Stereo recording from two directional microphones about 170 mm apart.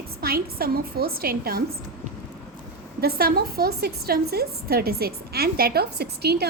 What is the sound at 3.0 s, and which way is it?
A woman's voice, 65° right (ahead or behind).